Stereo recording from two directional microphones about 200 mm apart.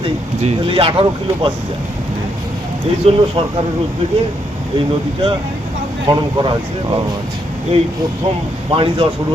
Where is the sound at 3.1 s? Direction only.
30° right (ahead or behind).